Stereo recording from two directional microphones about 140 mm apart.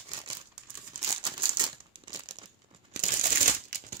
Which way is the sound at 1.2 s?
35° right (ahead or behind).